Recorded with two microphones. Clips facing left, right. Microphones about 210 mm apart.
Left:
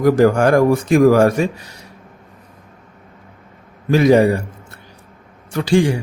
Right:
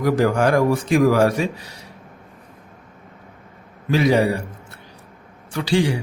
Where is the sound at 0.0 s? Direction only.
45° left (ahead or behind).